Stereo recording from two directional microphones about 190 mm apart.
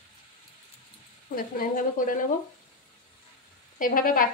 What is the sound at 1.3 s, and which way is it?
Speech, 45° left (ahead or behind).